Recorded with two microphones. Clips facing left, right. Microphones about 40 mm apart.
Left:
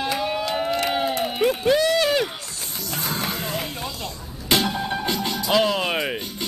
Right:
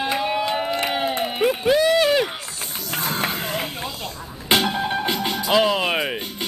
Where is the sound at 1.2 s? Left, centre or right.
Centre.